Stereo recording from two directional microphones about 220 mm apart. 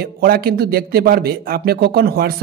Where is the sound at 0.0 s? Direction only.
45° right (ahead or behind).